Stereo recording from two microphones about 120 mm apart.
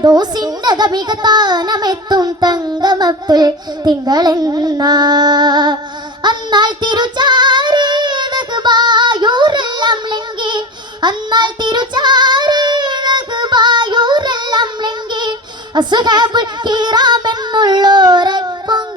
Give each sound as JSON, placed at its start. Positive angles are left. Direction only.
{"t": 0.0, "sound": "a child's voice", "side_deg": -35}
{"t": 6.2, "sound": "child singing", "side_deg": -40}